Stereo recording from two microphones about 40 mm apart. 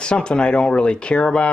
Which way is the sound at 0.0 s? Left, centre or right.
Left.